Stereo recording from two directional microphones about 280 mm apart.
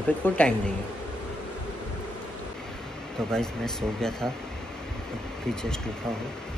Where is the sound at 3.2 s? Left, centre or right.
Centre.